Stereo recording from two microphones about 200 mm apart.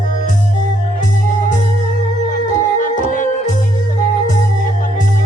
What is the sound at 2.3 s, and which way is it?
Music, 40° left (ahead or behind).